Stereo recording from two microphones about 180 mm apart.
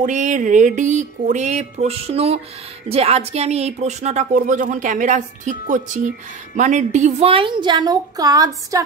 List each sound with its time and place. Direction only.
0.0 s speech: 45° right (ahead or behind); by 8.8 s 20° right (ahead or behind)